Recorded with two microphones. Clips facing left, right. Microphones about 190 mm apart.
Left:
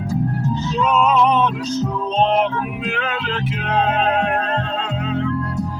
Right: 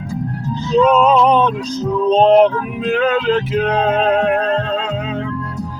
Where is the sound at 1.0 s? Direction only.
35° right (ahead or behind).